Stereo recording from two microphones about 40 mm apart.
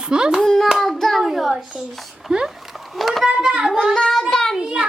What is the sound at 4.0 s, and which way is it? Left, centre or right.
Speech, centre.